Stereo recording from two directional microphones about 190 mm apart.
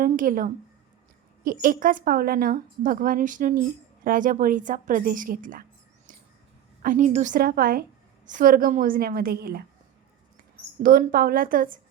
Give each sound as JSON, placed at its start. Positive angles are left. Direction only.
{"t": 0.0, "sound": "a woman's voice", "side_deg": -45}
{"t": 6.8, "sound": "a woman's voice", "side_deg": -40}
{"t": 10.8, "sound": "a woman's voice", "side_deg": -45}